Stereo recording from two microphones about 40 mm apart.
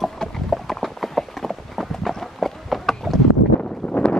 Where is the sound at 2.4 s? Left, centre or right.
Centre.